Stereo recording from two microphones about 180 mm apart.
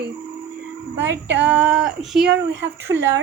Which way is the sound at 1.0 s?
10° right (ahead or behind).